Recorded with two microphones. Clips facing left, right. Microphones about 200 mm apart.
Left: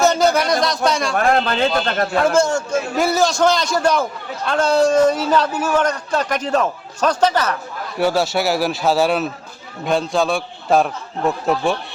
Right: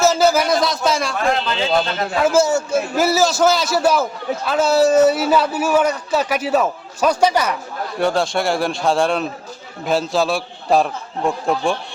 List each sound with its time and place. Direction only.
0.0 s a sound: 5° right (ahead or behind)
0.9 s a man's voice: centre (ahead or behind)
1.1 s a man's voice: 55° left (ahead or behind)
2.2 s a man's voice: 5° right (ahead or behind)
7.9 s a man's voice: 5° left (ahead or behind)